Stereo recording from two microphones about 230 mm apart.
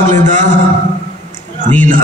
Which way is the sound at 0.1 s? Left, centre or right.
Right.